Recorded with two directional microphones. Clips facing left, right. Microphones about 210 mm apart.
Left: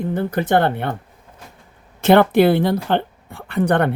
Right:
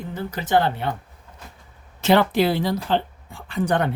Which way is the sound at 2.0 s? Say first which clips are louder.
Left 5 dB; 55° left (ahead or behind).